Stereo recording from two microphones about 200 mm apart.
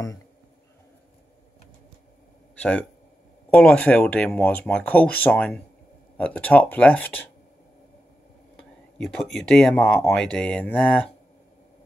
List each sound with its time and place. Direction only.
2.6 s speech: 5° left (ahead or behind)
8.9 s speech: centre (ahead or behind)